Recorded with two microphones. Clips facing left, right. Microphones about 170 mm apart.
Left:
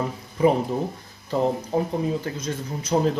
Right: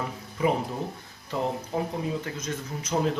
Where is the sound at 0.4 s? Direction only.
35° left (ahead or behind).